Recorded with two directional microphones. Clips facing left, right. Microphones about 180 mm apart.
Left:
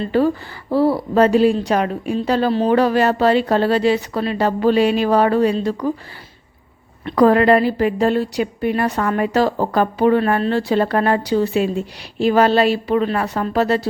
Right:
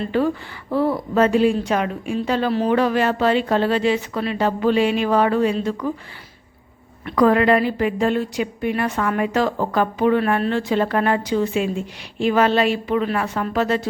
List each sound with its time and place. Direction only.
0.0 s a woman's voice: 35° left (ahead or behind)
7.0 s a woman's voice: 35° left (ahead or behind)